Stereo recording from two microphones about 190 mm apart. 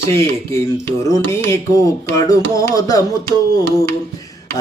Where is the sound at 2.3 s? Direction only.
15° left (ahead or behind).